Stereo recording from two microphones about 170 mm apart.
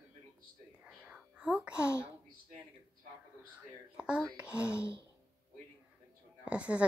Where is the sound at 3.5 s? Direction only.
5° right (ahead or behind).